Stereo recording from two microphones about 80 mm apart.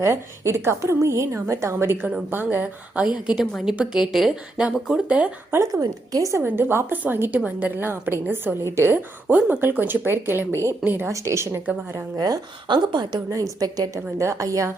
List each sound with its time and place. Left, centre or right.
0.0 s a woman's voice: right; by 3.1 s centre
3.7 s speech: centre
5.5 s a woman's voice: right
5.8 s a woman's voice: right
12.1 s speech: right
12.6 s a woman's voice: right
13.3 s a woman's voice: right